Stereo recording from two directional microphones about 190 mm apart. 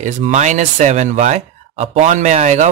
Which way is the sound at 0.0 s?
40° right (ahead or behind).